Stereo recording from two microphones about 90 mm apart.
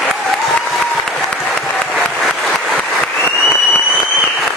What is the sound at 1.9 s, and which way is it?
Applause, 5° left (ahead or behind).